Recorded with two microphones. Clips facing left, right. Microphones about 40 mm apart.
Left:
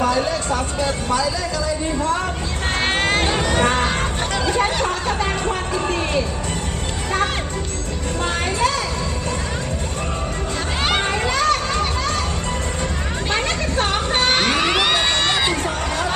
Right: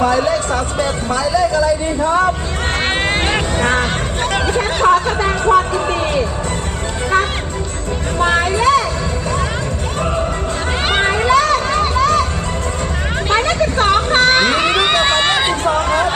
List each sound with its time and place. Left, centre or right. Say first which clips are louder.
0.1 s speech: right 5 dB; right
2.8 s music: right 1 dB; right
3.2 s speech: right 2 dB; right
4.4 s music: right 6 dB; right
8.2 s a sound: right 7 dB; right
11.1 s a sound: right 6 dB; right
11.9 s music: right 9 dB; right
13.7 s a sound: right 6 dB; right
14.7 s run: right 4 dB; right
15.6 s chatter: right 8 dB; right